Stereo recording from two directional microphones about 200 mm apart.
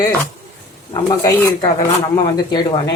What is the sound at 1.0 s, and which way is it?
Speech, 20° left (ahead or behind).